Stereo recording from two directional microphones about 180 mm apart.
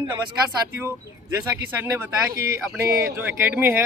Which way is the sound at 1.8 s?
10° right (ahead or behind).